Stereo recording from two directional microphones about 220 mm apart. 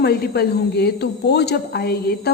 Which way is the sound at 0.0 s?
45° left (ahead or behind).